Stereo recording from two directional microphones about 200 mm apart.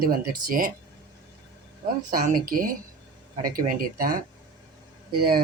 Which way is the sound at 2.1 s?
45° right (ahead or behind).